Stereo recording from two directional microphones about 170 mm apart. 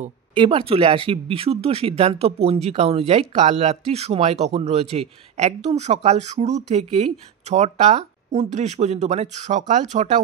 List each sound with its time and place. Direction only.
0.4 s speech: 30° right (ahead or behind)